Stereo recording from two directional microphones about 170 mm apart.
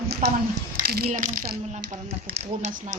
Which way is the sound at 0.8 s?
65° right (ahead or behind).